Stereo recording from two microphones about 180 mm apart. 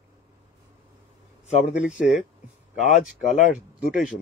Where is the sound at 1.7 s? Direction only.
5° right (ahead or behind).